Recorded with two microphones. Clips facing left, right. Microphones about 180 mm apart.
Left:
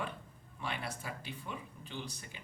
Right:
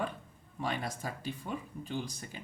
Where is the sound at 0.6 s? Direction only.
40° right (ahead or behind).